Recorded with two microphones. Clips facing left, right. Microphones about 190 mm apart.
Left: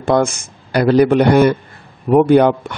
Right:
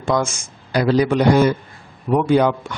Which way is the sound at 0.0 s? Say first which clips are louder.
Left 5 dB; 60° left (ahead or behind).